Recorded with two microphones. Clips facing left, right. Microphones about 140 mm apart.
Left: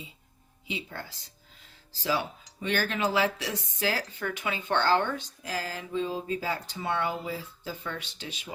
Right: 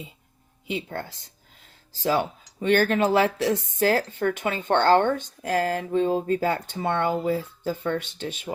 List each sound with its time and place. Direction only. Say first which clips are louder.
0.7 s speech: right 7 dB; 50° right (ahead or behind)